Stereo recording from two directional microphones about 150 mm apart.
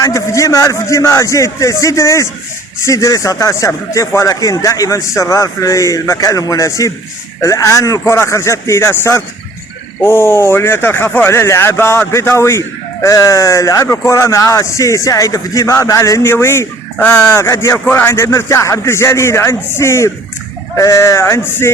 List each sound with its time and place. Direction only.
0.0 s speech: 20° left (ahead or behind)